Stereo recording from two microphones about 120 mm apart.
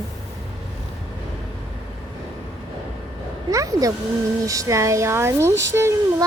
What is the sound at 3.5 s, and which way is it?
A child's voice, 30° right (ahead or behind).